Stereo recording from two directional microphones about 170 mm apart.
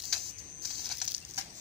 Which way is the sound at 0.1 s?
Centre (ahead or behind).